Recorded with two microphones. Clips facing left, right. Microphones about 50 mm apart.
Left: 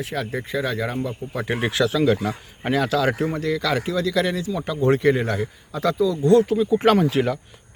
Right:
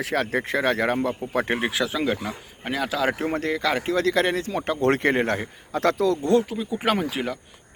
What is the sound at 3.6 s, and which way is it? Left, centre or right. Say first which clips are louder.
Speech: left 1 dB; right.